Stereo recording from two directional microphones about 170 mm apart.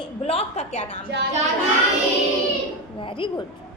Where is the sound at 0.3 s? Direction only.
40° left (ahead or behind).